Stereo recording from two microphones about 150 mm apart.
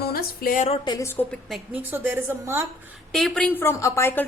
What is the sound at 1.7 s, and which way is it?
Speech, 10° right (ahead or behind).